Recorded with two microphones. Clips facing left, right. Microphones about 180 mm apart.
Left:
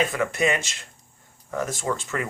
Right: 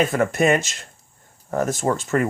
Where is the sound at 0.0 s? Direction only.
45° right (ahead or behind).